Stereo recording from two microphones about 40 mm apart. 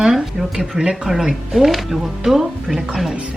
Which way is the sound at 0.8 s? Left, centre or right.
Centre.